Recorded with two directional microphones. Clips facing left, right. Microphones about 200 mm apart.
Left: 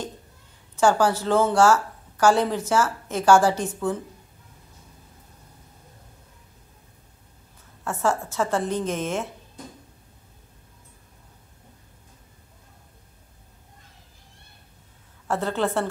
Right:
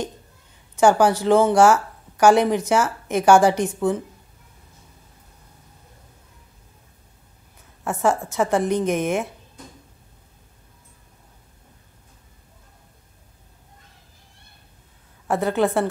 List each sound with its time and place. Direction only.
0.7 s a woman's voice: 15° right (ahead or behind)
7.8 s a woman's voice: 15° right (ahead or behind)
15.2 s a woman's voice: 15° right (ahead or behind)